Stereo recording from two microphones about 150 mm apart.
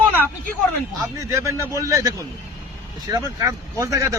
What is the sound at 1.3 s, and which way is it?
Speech, 20° right (ahead or behind).